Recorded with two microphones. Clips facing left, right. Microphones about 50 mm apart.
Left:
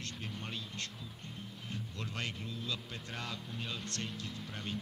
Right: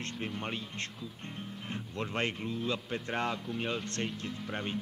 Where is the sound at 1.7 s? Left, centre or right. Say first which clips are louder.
Right 7 dB; right.